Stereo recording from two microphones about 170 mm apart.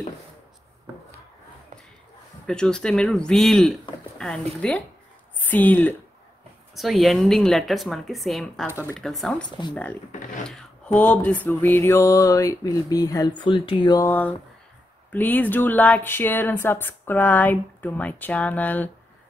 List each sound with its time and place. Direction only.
2.4 s a woman's voice: 5° left (ahead or behind)
6.7 s a woman's voice: centre (ahead or behind)
10.4 s a sound: 5° left (ahead or behind)
15.0 s speech: 10° left (ahead or behind)